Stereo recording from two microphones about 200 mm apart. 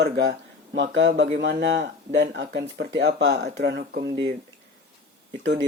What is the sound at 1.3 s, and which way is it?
Speech, 60° right (ahead or behind).